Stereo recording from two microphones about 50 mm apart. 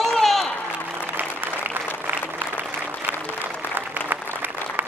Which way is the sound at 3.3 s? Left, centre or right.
Right.